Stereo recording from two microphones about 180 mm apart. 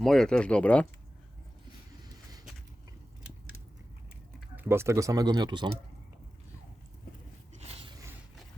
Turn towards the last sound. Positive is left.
turn(degrees=-35)  # may be behind; listen again after turning